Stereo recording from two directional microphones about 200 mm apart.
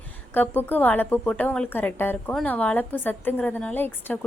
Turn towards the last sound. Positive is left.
turn(degrees=10)  # may be behind; listen again after turning